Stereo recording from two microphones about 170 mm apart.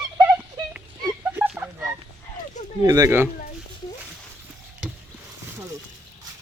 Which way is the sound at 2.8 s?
20° right (ahead or behind).